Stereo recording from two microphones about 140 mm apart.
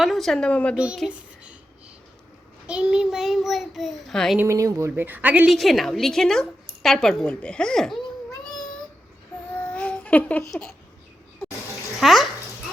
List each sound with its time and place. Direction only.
0.0 s a woman's voice: centre (ahead or behind)
2.6 s a woman's voice: 10° right (ahead or behind)
4.4 s speech: 20° right (ahead or behind)
4.9 s a woman's voice: 15° right (ahead or behind)
5.5 s a woman's voice: centre (ahead or behind)
9.6 s babbling: 10° left (ahead or behind)
11.9 s a woman's voice: centre (ahead or behind)